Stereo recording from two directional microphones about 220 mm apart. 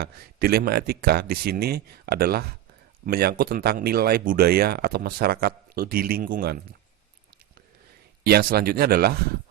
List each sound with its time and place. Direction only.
0.0 s speech: 45° right (ahead or behind)
8.2 s speech: 45° right (ahead or behind)